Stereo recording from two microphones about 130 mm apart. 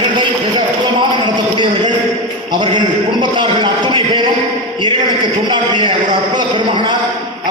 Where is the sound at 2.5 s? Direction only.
35° right (ahead or behind).